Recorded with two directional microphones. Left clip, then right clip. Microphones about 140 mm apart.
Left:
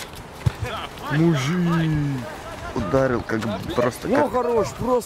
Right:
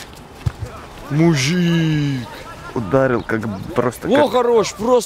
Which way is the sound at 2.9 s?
15° right (ahead or behind).